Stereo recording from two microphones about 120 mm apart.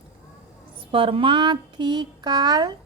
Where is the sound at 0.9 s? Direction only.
45° right (ahead or behind).